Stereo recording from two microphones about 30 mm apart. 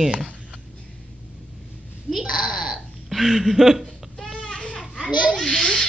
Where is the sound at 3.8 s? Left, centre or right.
Centre.